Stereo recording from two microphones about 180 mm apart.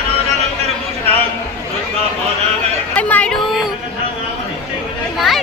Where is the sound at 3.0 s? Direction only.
10° left (ahead or behind).